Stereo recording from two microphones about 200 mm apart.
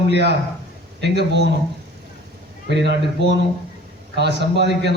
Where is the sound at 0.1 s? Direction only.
60° right (ahead or behind).